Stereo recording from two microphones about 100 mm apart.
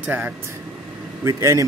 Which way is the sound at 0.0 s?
15° right (ahead or behind).